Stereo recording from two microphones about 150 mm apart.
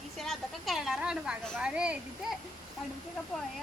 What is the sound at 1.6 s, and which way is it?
Speech, 5° right (ahead or behind).